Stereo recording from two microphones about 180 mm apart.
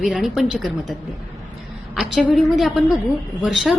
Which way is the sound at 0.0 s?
Centre (ahead or behind).